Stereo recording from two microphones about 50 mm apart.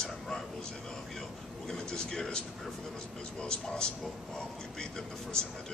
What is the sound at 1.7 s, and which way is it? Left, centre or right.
Speech, centre.